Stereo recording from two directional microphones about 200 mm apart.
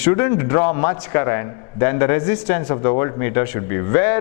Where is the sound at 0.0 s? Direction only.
15° left (ahead or behind).